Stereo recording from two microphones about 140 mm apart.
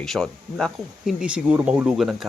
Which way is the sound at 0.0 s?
Centre (ahead or behind).